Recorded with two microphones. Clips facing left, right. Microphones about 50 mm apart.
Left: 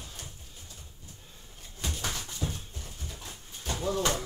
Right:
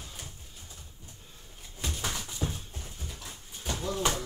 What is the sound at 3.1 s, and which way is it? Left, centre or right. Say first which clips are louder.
Pigeon: even; centre.